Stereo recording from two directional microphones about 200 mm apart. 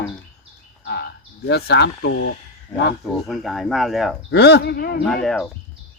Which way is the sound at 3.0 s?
Centre (ahead or behind).